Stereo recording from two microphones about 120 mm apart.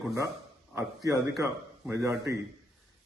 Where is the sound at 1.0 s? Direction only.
30° right (ahead or behind).